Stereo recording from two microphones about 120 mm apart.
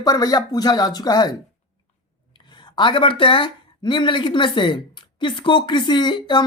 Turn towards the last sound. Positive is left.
turn(degrees=40)  # may be behind; listen again after turning